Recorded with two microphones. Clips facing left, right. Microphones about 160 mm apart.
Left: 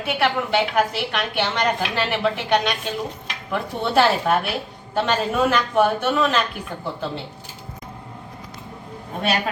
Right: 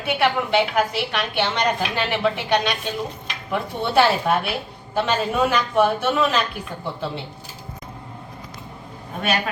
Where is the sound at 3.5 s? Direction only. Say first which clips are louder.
Even; 5° right (ahead or behind).